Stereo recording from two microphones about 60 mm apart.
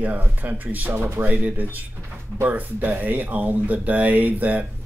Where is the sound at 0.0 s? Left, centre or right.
Right.